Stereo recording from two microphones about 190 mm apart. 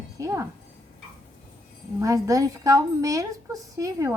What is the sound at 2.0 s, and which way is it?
A woman's voice, 15° right (ahead or behind).